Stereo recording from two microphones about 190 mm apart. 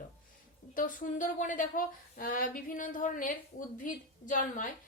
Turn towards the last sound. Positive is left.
turn(degrees=45)  # may be behind; listen again after turning